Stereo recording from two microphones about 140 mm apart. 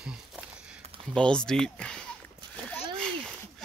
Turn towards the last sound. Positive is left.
turn(degrees=5)  # may be behind; listen again after turning